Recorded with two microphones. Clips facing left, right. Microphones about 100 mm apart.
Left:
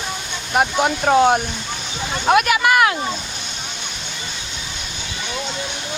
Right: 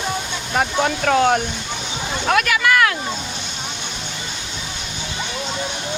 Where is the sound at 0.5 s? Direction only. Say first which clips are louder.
Left 2 dB; 15° left (ahead or behind).